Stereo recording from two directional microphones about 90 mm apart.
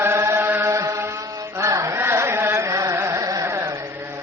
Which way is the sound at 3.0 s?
35° right (ahead or behind).